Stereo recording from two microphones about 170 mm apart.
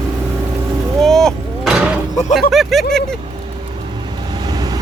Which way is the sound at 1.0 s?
Centre (ahead or behind).